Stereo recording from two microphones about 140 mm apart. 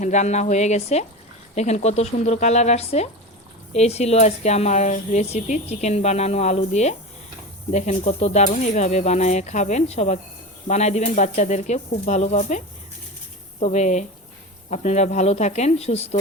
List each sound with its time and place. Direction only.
0.0 s speech: 55° left (ahead or behind)